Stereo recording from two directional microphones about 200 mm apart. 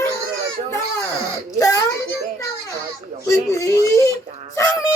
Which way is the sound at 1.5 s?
15° left (ahead or behind).